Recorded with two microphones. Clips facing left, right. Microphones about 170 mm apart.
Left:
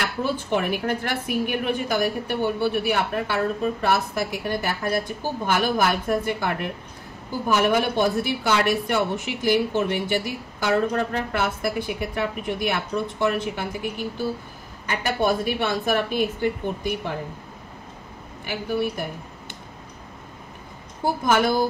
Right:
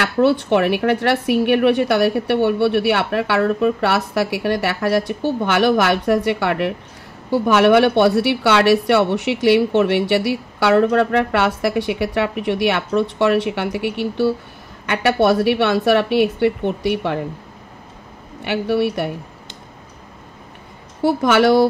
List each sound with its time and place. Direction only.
0.0 s speech: 75° right (ahead or behind)
18.4 s speech: 75° right (ahead or behind)
21.0 s a woman's voice: 85° right